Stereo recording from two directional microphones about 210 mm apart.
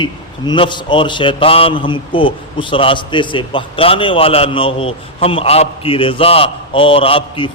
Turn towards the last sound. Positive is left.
turn(degrees=25)  # may be behind; listen again after turning